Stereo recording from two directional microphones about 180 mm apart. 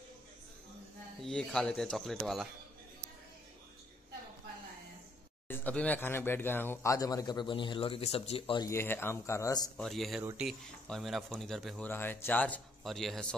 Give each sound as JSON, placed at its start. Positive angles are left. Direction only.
{"t": 1.2, "sound": "speech", "side_deg": 5}
{"t": 5.5, "sound": "a man's voice", "side_deg": 10}
{"t": 8.6, "sound": "a man's voice", "side_deg": 15}
{"t": 9.8, "sound": "speech", "side_deg": 0}
{"t": 11.9, "sound": "a man's voice", "side_deg": 10}